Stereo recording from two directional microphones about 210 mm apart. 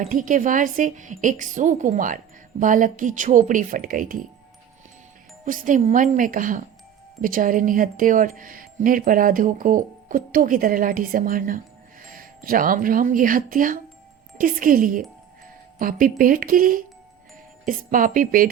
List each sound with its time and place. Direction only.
0.1 s speech: 40° right (ahead or behind)
5.5 s speech: 40° right (ahead or behind)